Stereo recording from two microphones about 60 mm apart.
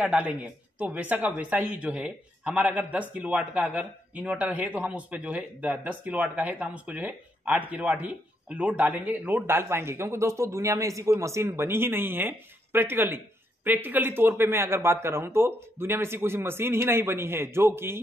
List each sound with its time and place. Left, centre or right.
0.2 s speech: right
1.7 s a man's voice: centre; by 18.0 s right